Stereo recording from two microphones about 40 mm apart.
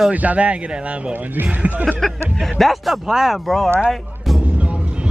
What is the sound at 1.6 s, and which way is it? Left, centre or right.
Speech, right.